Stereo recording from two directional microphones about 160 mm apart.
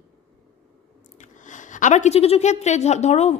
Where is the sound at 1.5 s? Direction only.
50° left (ahead or behind).